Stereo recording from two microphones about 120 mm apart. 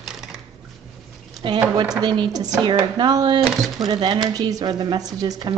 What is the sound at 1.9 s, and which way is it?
Speech, 35° right (ahead or behind).